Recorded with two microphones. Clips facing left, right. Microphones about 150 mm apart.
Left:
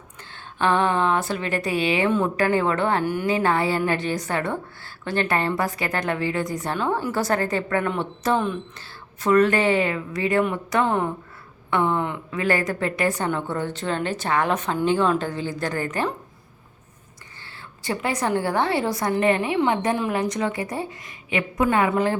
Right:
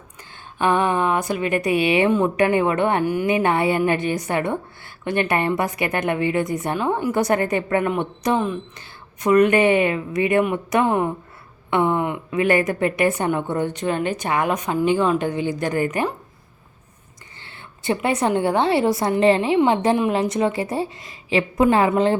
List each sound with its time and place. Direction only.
0.3 s a woman's voice: 10° right (ahead or behind)
17.4 s a woman's voice: 20° right (ahead or behind)